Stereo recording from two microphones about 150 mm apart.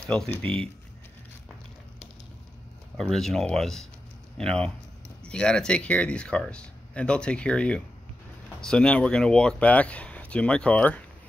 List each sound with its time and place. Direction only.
0.0 s speech: 5° left (ahead or behind)
3.0 s speech: 5° left (ahead or behind)